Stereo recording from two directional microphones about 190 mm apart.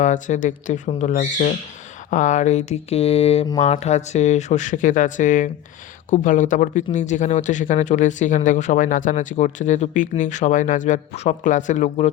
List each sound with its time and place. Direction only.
0.0 s speech: 40° left (ahead or behind)